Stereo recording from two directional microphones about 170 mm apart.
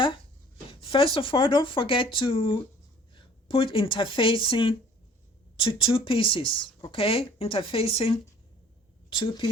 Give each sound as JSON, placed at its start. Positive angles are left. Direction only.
{"t": 0.7, "sound": "a woman's voice", "side_deg": 35}